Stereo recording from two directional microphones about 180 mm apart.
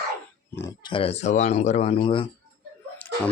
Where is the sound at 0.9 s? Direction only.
30° left (ahead or behind).